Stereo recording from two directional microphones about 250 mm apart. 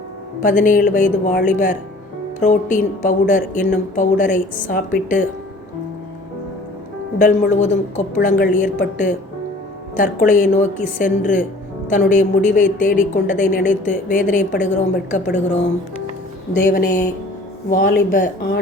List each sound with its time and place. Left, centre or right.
0.4 s a woman's voice: left
7.2 s a woman's voice: left
16.6 s a woman's voice: left